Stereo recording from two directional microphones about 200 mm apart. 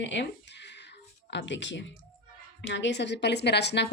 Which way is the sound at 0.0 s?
65° left (ahead or behind).